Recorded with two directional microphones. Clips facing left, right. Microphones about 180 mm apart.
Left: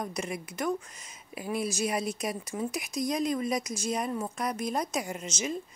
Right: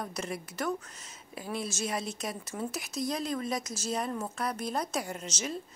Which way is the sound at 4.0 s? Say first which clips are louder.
Left 2 dB; 10° left (ahead or behind).